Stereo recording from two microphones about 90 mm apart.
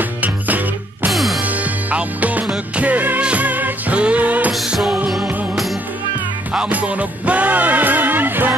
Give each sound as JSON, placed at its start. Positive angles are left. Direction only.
{"t": 0.2, "sound": "music", "side_deg": -20}
{"t": 1.1, "sound": "music", "side_deg": 0}
{"t": 1.4, "sound": "music", "side_deg": -15}
{"t": 4.5, "sound": "music", "side_deg": -5}
{"t": 6.5, "sound": "music", "side_deg": -15}